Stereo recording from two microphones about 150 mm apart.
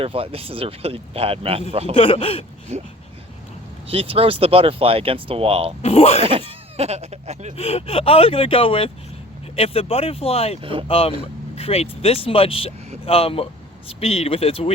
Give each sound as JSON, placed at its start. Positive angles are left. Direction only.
{"t": 0.0, "sound": "speech", "side_deg": -40}
{"t": 2.0, "sound": "speech", "side_deg": 40}
{"t": 3.8, "sound": "speech", "side_deg": -40}
{"t": 5.8, "sound": "speech", "side_deg": 40}
{"t": 6.7, "sound": "speech", "side_deg": -45}
{"t": 7.5, "sound": "speech", "side_deg": 40}
{"t": 10.6, "sound": "speech", "side_deg": -35}
{"t": 10.8, "sound": "speech", "side_deg": 40}